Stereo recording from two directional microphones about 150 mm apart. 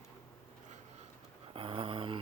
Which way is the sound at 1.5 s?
35° right (ahead or behind).